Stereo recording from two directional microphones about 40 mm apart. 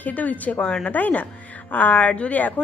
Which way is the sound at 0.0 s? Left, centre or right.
Left.